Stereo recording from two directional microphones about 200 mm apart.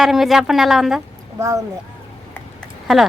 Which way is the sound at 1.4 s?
15° right (ahead or behind).